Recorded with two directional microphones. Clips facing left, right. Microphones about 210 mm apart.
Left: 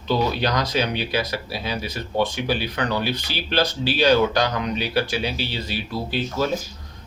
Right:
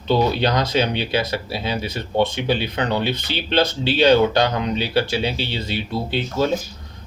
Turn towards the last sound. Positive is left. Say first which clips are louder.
# right 3 dB
turn(degrees=-25)  # may be behind; listen again after turning